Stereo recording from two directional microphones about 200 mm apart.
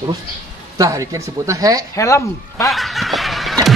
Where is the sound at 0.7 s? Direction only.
15° right (ahead or behind).